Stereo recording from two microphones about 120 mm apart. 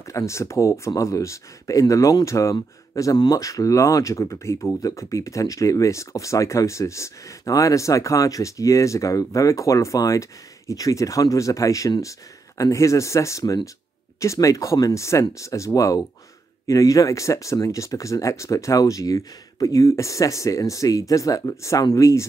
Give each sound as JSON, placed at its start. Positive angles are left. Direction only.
{"t": 0.0, "sound": "speech", "side_deg": 25}